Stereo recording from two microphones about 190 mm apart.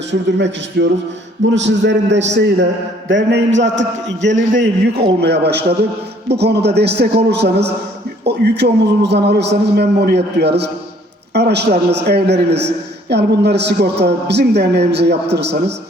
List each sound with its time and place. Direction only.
0.1 s a man's voice: 70° right (ahead or behind)
5.2 s a man's voice: 60° right (ahead or behind)